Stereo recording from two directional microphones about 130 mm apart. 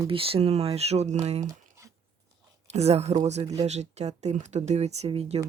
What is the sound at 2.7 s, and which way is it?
Speech, 55° right (ahead or behind).